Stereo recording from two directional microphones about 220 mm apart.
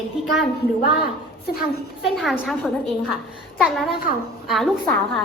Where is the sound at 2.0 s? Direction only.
Centre (ahead or behind).